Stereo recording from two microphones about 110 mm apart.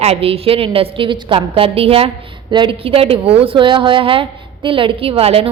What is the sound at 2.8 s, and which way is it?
A woman's voice, 60° right (ahead or behind).